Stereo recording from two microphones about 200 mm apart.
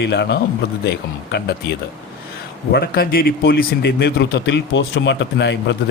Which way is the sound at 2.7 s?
50° left (ahead or behind).